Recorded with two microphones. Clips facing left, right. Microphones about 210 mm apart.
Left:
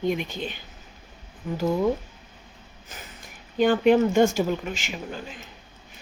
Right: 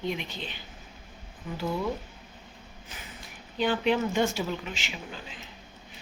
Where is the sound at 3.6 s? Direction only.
50° left (ahead or behind).